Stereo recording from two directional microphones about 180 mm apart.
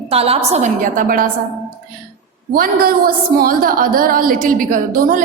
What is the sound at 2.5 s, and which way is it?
A woman's voice, 55° right (ahead or behind).